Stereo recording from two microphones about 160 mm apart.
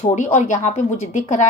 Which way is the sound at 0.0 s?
45° left (ahead or behind).